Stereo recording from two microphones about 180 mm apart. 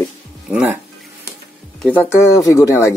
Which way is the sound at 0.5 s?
5° right (ahead or behind).